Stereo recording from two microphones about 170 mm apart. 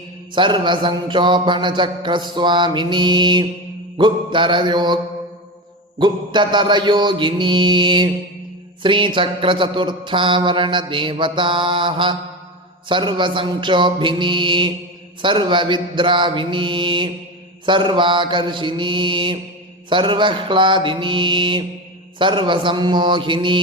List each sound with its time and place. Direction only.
0.3 s mantra: 30° right (ahead or behind)
6.0 s mantra: 25° right (ahead or behind)